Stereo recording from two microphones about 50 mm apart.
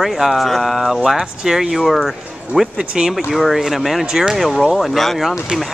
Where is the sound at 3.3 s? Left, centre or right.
Centre.